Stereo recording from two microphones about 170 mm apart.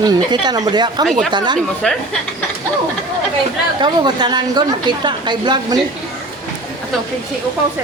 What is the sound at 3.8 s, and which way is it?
A woman's voice, 25° right (ahead or behind).